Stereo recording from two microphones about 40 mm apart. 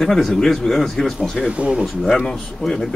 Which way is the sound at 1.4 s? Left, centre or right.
Right.